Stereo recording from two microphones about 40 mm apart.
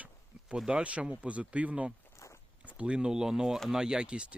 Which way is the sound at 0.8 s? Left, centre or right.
Right.